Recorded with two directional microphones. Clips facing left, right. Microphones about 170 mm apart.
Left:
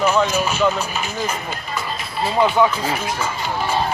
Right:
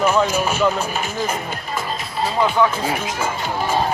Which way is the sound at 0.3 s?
50° right (ahead or behind).